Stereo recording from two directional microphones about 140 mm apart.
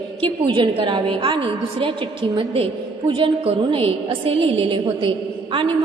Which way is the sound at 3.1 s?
40° right (ahead or behind).